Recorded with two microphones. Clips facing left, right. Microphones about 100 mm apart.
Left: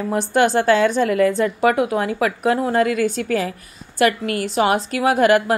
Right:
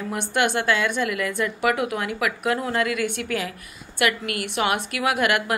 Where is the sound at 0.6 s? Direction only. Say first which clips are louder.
Left 7 dB; 35° left (ahead or behind).